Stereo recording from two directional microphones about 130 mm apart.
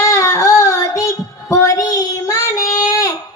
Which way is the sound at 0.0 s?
25° left (ahead or behind).